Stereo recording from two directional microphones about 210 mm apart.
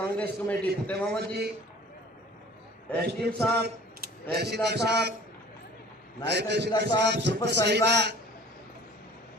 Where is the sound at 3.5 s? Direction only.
50° right (ahead or behind).